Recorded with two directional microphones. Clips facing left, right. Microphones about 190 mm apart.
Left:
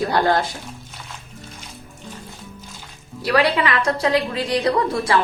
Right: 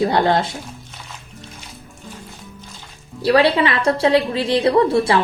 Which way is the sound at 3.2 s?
30° right (ahead or behind).